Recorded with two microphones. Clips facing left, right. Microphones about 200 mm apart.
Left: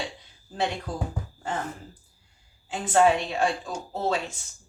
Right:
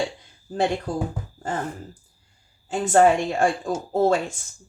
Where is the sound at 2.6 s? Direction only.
45° right (ahead or behind).